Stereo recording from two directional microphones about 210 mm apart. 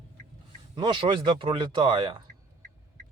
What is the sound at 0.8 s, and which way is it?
Speech, 20° right (ahead or behind).